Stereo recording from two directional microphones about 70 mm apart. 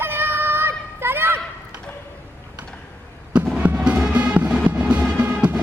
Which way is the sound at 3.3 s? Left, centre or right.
Centre.